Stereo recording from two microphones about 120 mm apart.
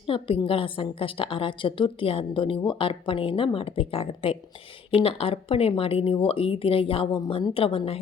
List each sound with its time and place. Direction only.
0.1 s a woman's voice: 50° left (ahead or behind)